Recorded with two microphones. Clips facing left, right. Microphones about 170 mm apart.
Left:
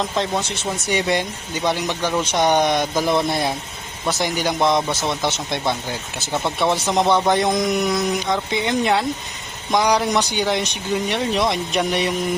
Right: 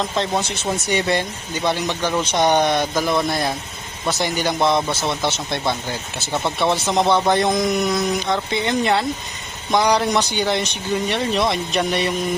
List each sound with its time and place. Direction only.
0.0 s speech: 5° left (ahead or behind)
3.0 s speech: 25° left (ahead or behind)
4.1 s speech: 10° left (ahead or behind)